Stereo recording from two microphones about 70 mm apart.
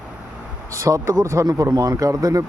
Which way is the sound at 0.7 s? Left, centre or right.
Right.